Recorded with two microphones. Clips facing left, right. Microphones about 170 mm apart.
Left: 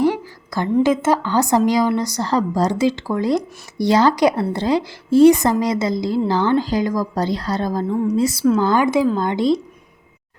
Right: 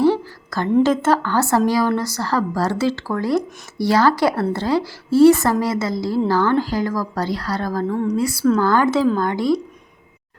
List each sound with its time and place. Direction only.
0.0 s a woman's voice: 15° left (ahead or behind)
8.4 s a woman's voice: 5° left (ahead or behind); by 9.6 s 20° left (ahead or behind)